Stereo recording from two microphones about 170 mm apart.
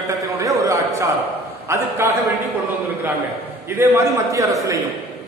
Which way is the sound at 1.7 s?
15° right (ahead or behind).